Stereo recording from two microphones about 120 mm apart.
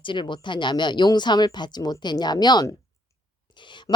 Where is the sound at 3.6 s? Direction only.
40° left (ahead or behind).